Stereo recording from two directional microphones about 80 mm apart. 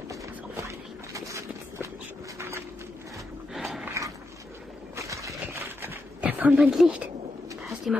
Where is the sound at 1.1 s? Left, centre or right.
Right.